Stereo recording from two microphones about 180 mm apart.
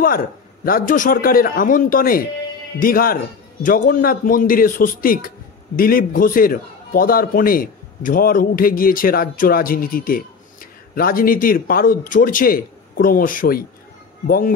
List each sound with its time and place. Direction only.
0.7 s a man's voice: 50° left (ahead or behind)